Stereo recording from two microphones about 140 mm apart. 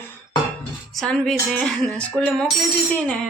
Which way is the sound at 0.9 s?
5° left (ahead or behind).